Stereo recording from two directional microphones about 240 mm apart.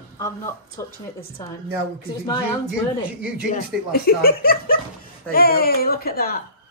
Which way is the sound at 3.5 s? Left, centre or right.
Left.